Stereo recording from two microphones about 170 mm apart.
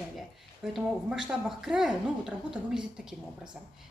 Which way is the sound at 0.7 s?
5° right (ahead or behind).